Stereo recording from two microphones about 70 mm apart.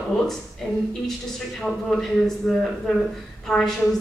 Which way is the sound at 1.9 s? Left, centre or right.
Centre.